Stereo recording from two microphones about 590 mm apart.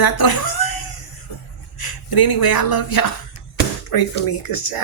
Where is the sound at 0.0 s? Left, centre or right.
Left.